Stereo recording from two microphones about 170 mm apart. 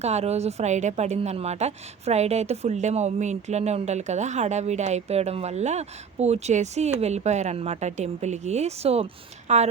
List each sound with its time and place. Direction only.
0.0 s a woman's voice: 40° right (ahead or behind)